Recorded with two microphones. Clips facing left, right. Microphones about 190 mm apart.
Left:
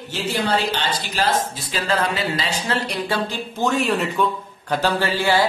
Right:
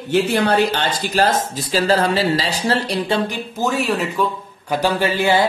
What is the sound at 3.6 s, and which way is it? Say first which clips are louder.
Speech: even; 5° right (ahead or behind).